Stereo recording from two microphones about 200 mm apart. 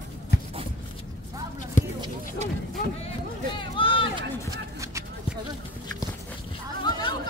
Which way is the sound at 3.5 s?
25° left (ahead or behind).